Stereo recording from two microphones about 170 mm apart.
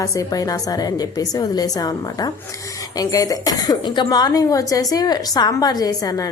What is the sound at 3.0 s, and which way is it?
A woman's voice, 20° left (ahead or behind).